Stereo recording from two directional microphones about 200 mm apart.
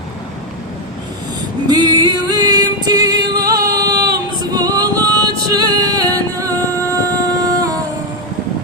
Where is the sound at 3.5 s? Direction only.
45° right (ahead or behind).